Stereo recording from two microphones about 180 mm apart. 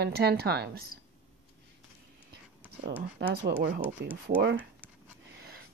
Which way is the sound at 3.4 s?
65° right (ahead or behind).